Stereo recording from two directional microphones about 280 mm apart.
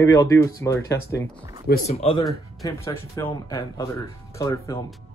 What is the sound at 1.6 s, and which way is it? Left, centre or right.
Speech, left.